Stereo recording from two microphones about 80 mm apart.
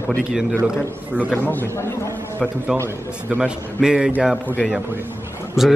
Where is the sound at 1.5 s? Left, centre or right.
Left.